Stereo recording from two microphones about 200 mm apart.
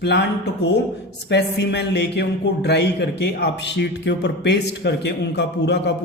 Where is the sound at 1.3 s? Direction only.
60° left (ahead or behind).